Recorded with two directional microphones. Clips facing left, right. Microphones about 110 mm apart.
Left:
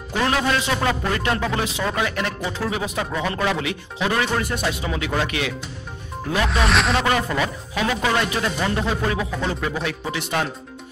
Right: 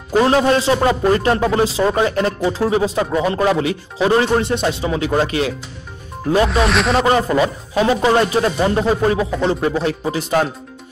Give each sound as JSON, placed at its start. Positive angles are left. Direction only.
{"t": 0.1, "sound": "speech", "side_deg": -30}
{"t": 6.5, "sound": "speech", "side_deg": 0}
{"t": 7.1, "sound": "speech", "side_deg": -30}